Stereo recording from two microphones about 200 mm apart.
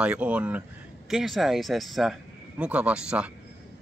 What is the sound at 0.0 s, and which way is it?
Speech, 5° right (ahead or behind).